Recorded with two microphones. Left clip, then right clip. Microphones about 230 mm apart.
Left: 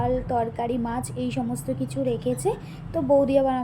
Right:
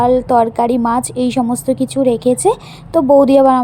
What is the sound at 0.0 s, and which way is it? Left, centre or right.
A woman's voice, right.